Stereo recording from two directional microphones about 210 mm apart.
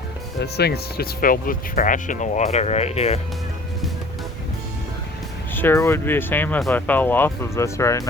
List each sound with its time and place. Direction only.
0.3 s speech: 50° left (ahead or behind); by 3.2 s 30° left (ahead or behind)
5.5 s speech: 10° left (ahead or behind)